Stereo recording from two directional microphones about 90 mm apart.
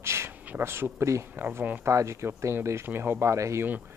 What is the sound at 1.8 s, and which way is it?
Speech, 30° right (ahead or behind).